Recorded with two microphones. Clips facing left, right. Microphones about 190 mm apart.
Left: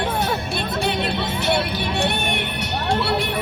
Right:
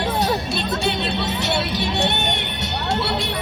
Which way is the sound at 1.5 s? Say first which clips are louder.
Even; 25° right (ahead or behind).